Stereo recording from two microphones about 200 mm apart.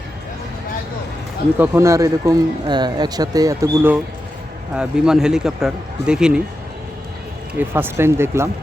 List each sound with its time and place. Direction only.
1.5 s speech: 10° right (ahead or behind)
7.6 s speech: 10° right (ahead or behind)